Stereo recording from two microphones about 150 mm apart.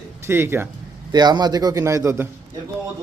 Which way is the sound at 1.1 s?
30° right (ahead or behind).